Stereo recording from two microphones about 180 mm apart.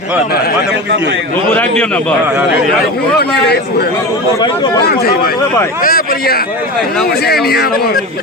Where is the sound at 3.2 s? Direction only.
60° left (ahead or behind).